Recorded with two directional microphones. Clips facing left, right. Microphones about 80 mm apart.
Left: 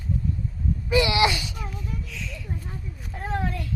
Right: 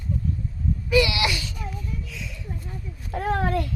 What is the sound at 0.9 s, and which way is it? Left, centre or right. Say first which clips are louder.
Speech: left 1 dB; left.